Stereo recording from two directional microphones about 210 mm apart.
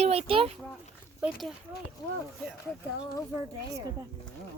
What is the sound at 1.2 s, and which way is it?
Speech, 5° right (ahead or behind).